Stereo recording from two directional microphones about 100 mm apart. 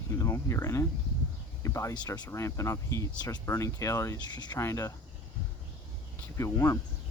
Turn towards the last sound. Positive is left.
turn(degrees=30)  # may be behind; listen again after turning